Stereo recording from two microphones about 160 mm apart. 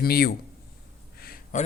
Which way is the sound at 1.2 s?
65° left (ahead or behind).